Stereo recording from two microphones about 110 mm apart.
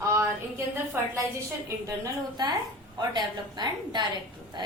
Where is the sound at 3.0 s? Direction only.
40° right (ahead or behind).